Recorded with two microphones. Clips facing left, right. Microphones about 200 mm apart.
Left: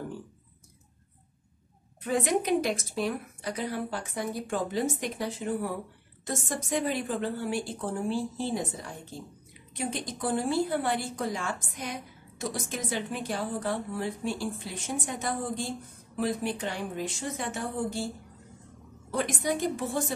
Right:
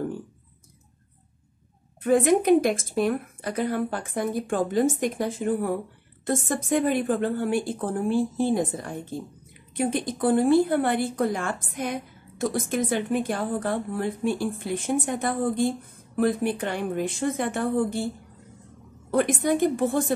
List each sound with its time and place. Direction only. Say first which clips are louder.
2.0 s a woman's voice: right 8 dB; 50° right (ahead or behind)
19.0 s a woman's voice: right 7 dB; 55° right (ahead or behind)